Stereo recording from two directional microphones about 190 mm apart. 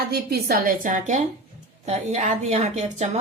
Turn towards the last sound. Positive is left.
turn(degrees=-35)  # may be behind; listen again after turning